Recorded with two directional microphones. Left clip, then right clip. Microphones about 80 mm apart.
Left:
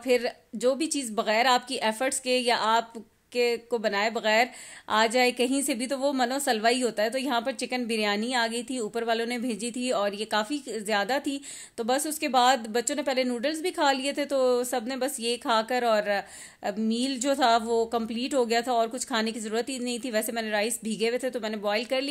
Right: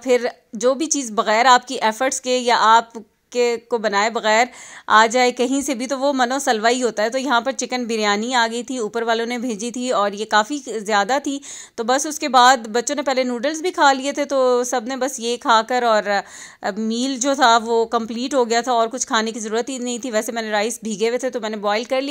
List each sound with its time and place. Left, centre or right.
0.0 s a woman's voice: right